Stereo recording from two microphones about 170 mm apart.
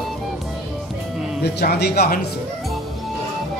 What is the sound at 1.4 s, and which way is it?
Speech, 75° left (ahead or behind).